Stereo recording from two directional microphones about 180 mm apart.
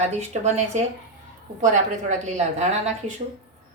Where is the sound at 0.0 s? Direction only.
40° right (ahead or behind).